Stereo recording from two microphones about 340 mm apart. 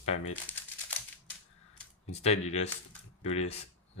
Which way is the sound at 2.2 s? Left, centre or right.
Centre.